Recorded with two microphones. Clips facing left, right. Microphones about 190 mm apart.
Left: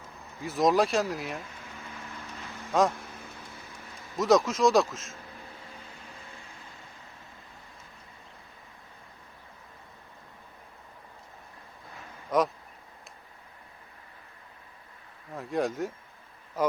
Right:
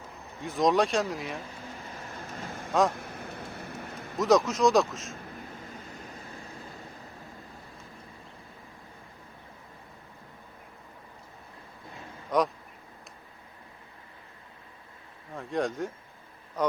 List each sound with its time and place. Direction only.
0.4 s speech: 5° left (ahead or behind)
2.4 s vehicle: 50° right (ahead or behind)
2.9 s a sound: 60° right (ahead or behind)
4.2 s speech: centre (ahead or behind)
12.3 s speech: centre (ahead or behind)
15.4 s speech: 5° left (ahead or behind)